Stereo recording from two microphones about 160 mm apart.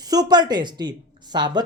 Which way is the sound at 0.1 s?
25° right (ahead or behind).